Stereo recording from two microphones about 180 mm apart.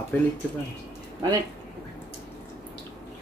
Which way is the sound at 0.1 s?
10° left (ahead or behind).